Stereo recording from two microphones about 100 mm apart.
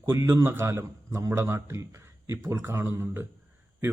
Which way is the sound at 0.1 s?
30° right (ahead or behind).